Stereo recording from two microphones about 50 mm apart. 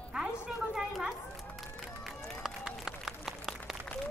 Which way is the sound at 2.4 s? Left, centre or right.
Centre.